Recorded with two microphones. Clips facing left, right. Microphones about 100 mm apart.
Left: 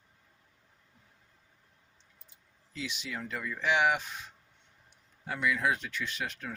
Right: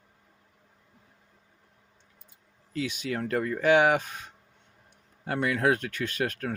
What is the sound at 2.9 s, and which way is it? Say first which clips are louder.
Speech: right 9 dB; 50° right (ahead or behind).